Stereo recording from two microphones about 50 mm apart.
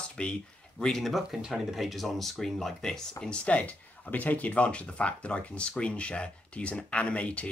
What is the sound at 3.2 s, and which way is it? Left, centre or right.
Speech, left.